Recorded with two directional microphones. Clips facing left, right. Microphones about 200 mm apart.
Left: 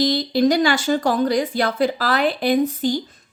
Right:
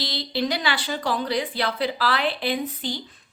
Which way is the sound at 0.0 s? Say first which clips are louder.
Left 10 dB; 45° left (ahead or behind).